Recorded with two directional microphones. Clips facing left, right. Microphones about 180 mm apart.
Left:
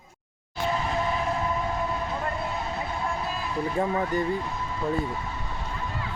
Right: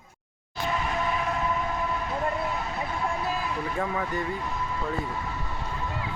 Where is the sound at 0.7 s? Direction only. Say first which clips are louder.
Left 1 dB; 30° left (ahead or behind).